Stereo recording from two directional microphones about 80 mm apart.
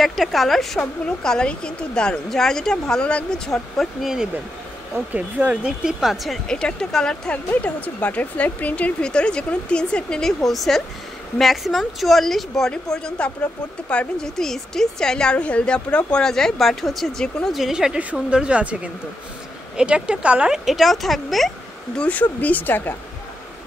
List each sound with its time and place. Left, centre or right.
0.0 s speech: centre
4.9 s speech: centre
10.4 s speech: centre
17.6 s a woman's voice: centre
21.9 s speech: centre